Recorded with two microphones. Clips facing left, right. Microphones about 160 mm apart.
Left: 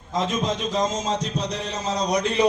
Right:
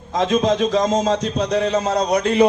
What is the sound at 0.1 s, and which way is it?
A man's voice, 70° right (ahead or behind).